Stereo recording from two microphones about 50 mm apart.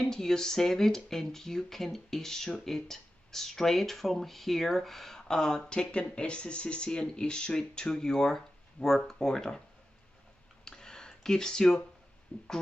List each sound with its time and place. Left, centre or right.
0.1 s speech: centre
10.6 s a sound: centre
12.3 s speech: left